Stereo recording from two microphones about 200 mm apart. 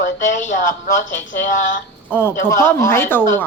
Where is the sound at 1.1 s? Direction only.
40° left (ahead or behind).